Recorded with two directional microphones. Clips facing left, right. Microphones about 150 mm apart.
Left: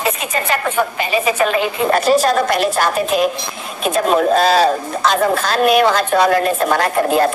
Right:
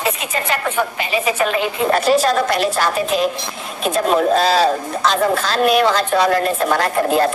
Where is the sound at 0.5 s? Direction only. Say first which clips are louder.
Left 2 dB; 45° left (ahead or behind).